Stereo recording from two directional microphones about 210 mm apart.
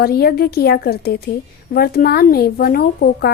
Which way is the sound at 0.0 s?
45° left (ahead or behind).